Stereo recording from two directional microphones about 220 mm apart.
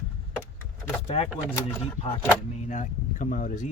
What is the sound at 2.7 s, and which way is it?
Speech, 35° left (ahead or behind).